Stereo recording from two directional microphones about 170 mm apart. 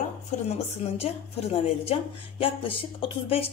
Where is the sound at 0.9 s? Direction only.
35° left (ahead or behind).